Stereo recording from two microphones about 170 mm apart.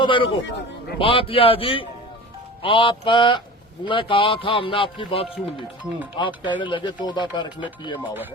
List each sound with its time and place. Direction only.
0.0 s speech: 30° left (ahead or behind)